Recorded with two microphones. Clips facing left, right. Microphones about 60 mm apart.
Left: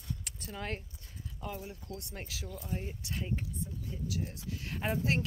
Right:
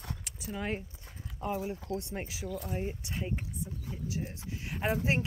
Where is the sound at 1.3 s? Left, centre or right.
Right.